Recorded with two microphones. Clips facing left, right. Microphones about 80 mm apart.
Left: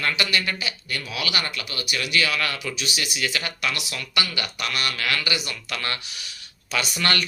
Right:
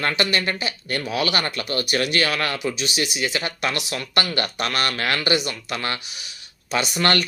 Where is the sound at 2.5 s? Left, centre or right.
Right.